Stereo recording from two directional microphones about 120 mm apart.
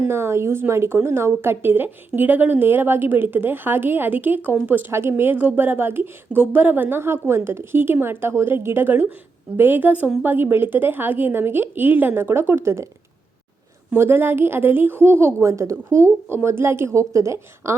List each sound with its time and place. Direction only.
0.1 s a woman's voice: 20° right (ahead or behind)
13.9 s a woman's voice: 20° right (ahead or behind)